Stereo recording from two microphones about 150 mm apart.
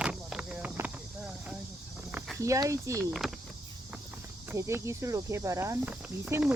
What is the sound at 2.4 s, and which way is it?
Speech, 20° right (ahead or behind).